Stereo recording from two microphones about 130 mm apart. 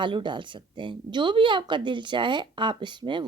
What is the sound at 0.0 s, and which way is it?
Speech, 40° right (ahead or behind).